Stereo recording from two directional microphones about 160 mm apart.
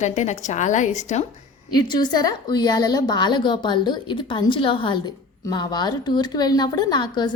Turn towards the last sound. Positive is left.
turn(degrees=25)  # may be behind; listen again after turning